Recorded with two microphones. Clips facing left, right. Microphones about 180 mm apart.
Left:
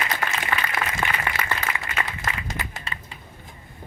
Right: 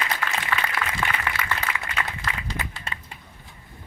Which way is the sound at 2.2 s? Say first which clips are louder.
Left 1 dB; 45° left (ahead or behind).